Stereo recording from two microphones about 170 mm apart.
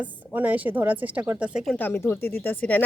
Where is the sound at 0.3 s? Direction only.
10° right (ahead or behind).